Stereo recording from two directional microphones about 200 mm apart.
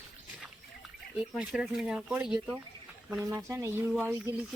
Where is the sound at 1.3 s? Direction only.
5° right (ahead or behind).